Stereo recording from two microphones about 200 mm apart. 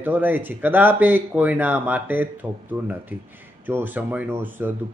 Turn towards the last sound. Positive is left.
turn(degrees=-10)  # may be behind; listen again after turning